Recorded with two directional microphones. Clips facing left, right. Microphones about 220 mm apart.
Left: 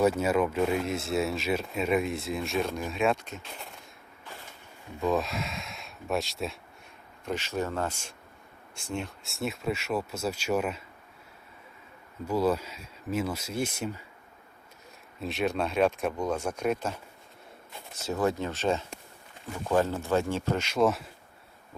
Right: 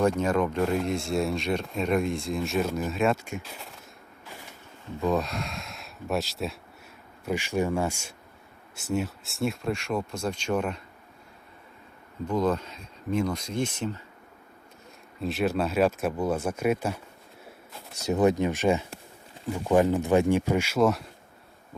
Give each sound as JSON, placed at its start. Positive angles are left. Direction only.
{"t": 0.0, "sound": "speech", "side_deg": 5}
{"t": 4.9, "sound": "speech", "side_deg": 0}
{"t": 7.3, "sound": "speech", "side_deg": -10}
{"t": 12.3, "sound": "speech", "side_deg": 10}
{"t": 15.2, "sound": "speech", "side_deg": 0}
{"t": 18.0, "sound": "speech", "side_deg": -20}